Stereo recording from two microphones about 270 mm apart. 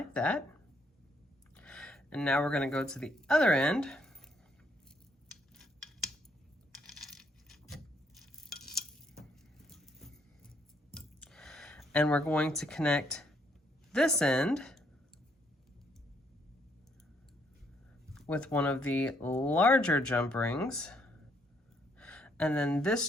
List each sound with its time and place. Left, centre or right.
0.1 s speech: centre
1.5 s speech: centre
6.8 s coin: centre
9.6 s vehicle: centre
10.9 s a sound: centre
13.9 s speech: centre
18.1 s speech: centre
21.9 s a sound: centre